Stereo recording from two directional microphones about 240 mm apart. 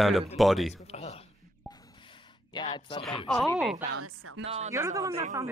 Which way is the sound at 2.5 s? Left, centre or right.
Centre.